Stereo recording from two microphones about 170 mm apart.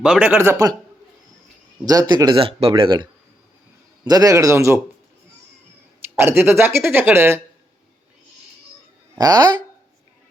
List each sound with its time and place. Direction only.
0.0 s speech: 5° right (ahead or behind)
1.8 s speech: 20° right (ahead or behind)
6.1 s speech: 15° right (ahead or behind)
9.1 s speech: 25° right (ahead or behind)